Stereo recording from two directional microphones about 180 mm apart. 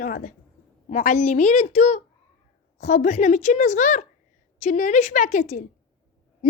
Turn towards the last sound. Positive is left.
turn(degrees=45)  # may be behind; listen again after turning